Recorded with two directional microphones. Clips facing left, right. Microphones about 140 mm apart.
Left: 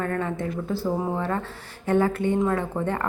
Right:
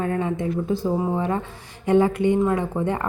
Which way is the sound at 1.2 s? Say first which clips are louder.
Right 3 dB; 15° right (ahead or behind).